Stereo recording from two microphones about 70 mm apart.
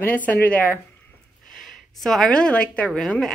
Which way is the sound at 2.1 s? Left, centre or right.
Centre.